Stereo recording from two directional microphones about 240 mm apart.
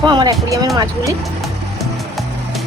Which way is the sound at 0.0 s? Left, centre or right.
Centre.